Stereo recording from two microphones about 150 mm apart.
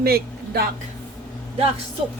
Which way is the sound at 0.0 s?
90° right.